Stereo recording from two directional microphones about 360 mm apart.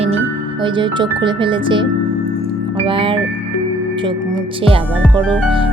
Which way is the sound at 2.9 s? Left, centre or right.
Centre.